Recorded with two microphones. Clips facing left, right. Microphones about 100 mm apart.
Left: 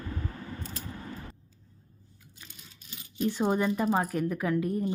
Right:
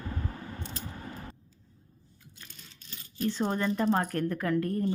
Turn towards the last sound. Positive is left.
turn(degrees=10)  # may be behind; listen again after turning